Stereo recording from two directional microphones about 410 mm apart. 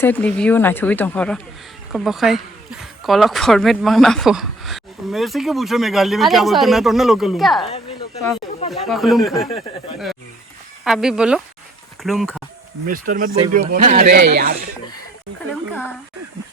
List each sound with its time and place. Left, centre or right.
0.0 s speech: centre
7.6 s a woman's voice: centre
8.7 s speech: centre
10.8 s speech: centre
12.9 s speech: centre
15.7 s speech: centre